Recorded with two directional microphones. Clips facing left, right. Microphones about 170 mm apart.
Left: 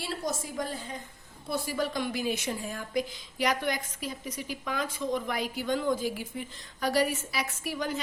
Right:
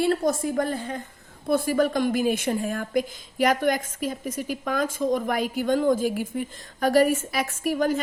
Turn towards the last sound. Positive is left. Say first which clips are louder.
# right 9 dB
turn(degrees=-45)  # may be behind; listen again after turning